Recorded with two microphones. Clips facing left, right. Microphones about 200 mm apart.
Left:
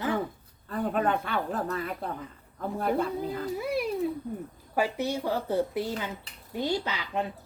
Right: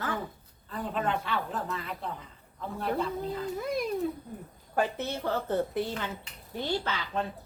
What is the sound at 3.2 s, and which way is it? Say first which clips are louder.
A woman's voice: left 2 dB; 10° left (ahead or behind).